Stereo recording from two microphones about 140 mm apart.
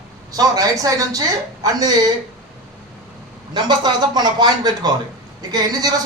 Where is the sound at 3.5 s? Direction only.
30° right (ahead or behind).